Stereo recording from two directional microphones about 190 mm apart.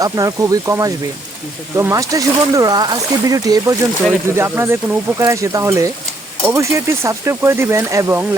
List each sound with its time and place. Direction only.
0.0 s speech: 15° right (ahead or behind)